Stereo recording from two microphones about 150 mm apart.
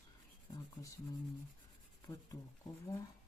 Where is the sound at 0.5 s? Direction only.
20° left (ahead or behind).